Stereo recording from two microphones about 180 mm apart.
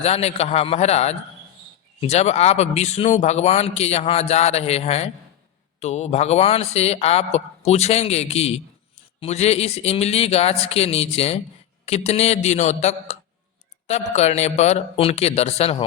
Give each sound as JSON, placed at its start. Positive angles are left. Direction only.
{"t": 0.0, "sound": "speech", "side_deg": 35}